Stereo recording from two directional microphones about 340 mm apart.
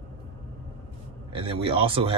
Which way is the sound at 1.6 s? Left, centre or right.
Centre.